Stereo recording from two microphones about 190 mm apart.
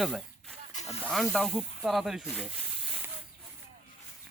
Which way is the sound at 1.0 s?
5° left (ahead or behind).